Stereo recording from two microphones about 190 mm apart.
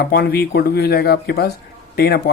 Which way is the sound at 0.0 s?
55° left (ahead or behind).